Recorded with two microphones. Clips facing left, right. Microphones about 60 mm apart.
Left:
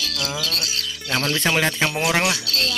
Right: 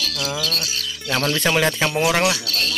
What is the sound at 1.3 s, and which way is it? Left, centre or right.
Speech, centre.